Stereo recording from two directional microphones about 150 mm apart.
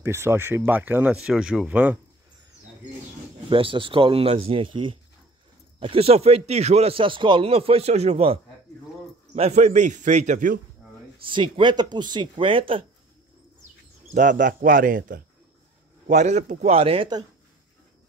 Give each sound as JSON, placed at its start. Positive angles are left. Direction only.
{"t": 0.0, "sound": "speech", "side_deg": -15}
{"t": 3.4, "sound": "a man's voice", "side_deg": -35}
{"t": 11.2, "sound": "speech", "side_deg": -35}
{"t": 14.1, "sound": "speech", "side_deg": -60}
{"t": 16.1, "sound": "a man's voice", "side_deg": -50}